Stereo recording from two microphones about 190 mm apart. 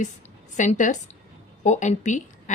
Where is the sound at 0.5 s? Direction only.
40° left (ahead or behind).